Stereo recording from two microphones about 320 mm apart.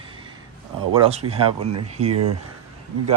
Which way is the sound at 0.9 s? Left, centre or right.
Centre.